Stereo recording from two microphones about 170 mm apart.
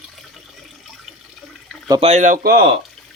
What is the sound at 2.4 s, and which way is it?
Speech, 65° right (ahead or behind).